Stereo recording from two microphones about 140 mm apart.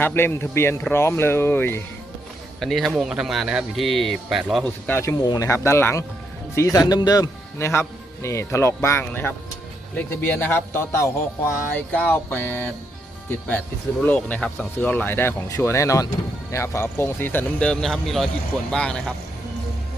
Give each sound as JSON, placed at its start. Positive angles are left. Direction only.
{"t": 0.0, "sound": "speech", "side_deg": 15}
{"t": 2.6, "sound": "speech", "side_deg": 0}
{"t": 4.6, "sound": "speech", "side_deg": 15}
{"t": 14.0, "sound": "speech", "side_deg": 10}